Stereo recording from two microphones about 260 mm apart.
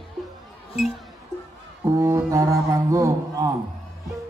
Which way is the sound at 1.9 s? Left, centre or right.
Centre.